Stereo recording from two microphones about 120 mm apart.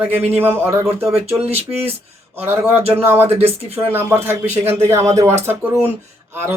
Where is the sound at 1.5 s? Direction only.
55° right (ahead or behind).